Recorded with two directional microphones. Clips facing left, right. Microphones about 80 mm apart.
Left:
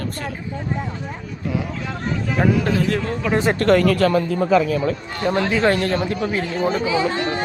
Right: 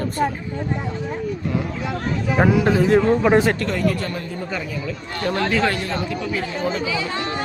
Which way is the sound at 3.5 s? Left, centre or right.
Left.